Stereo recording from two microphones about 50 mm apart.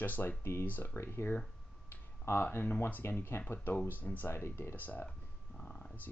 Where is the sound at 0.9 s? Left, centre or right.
Left.